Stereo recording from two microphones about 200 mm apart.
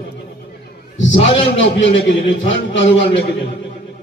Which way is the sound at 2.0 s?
65° left (ahead or behind).